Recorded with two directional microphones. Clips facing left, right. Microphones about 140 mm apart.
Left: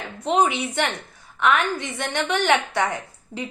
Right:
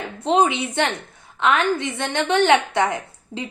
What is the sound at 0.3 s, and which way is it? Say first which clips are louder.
A woman's voice: right 2 dB; 25° right (ahead or behind).